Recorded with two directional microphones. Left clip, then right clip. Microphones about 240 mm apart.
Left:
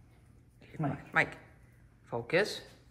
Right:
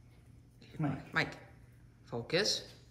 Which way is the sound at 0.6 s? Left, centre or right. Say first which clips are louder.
Left 2 dB; centre.